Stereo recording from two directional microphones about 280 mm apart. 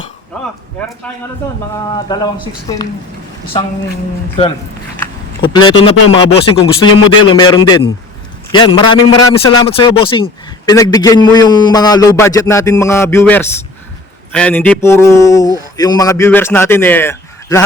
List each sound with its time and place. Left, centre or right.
2.0 s a man's voice: centre
5.4 s a man's voice: centre